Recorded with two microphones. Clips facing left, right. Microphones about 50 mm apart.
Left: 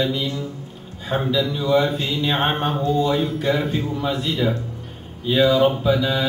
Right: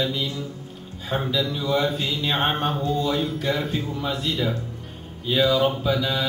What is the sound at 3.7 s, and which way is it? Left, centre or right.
Speech, centre.